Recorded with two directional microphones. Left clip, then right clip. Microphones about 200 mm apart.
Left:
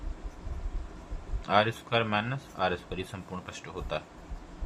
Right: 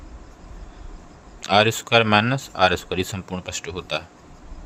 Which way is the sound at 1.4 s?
55° right (ahead or behind).